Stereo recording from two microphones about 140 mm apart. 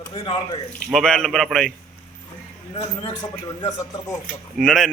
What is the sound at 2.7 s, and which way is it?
Speech, 40° left (ahead or behind).